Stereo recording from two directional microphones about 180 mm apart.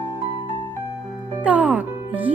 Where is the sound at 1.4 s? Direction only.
10° right (ahead or behind).